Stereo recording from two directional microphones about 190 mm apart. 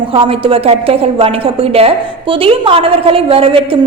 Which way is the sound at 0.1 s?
30° right (ahead or behind).